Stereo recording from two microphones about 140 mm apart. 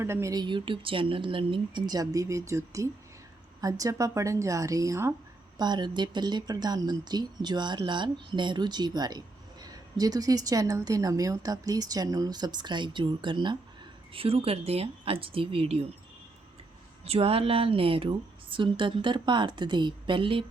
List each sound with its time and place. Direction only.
0.0 s a woman's voice: 20° right (ahead or behind); by 15.8 s 40° right (ahead or behind)
17.0 s a woman's voice: 45° right (ahead or behind)